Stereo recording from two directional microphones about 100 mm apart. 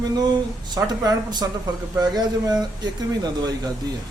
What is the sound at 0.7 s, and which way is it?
A man's voice, 40° right (ahead or behind).